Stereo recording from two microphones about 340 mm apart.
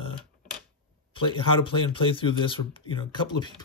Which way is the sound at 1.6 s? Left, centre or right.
Centre.